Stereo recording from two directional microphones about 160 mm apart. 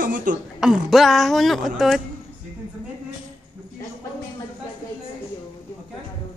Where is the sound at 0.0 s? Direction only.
55° right (ahead or behind).